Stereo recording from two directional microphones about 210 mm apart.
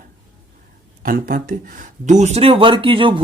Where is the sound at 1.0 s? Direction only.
45° right (ahead or behind).